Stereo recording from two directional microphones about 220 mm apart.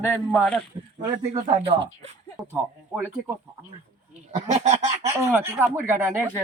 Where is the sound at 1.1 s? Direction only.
30° right (ahead or behind).